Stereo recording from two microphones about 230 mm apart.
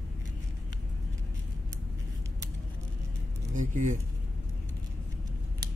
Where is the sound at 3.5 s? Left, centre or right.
Right.